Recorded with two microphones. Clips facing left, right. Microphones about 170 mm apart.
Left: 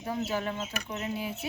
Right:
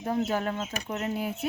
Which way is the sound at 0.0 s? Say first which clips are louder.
Right 4 dB; 45° right (ahead or behind).